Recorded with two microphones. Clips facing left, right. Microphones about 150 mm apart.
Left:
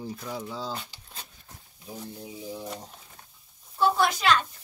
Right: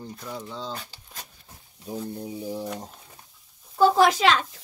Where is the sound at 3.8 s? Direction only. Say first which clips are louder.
Right 6 dB; 90° right.